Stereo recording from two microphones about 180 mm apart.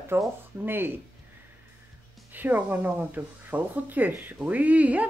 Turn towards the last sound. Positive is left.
turn(degrees=-10)  # may be behind; listen again after turning